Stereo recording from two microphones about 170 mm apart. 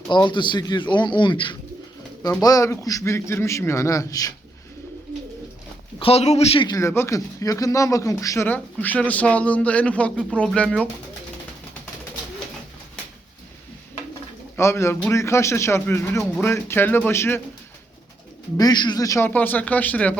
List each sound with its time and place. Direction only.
0.1 s speech: 25° left (ahead or behind)
6.0 s speech: 35° left (ahead or behind)
6.7 s speech: 15° left (ahead or behind)
14.5 s speech: 15° left (ahead or behind)
18.5 s speech: 25° left (ahead or behind)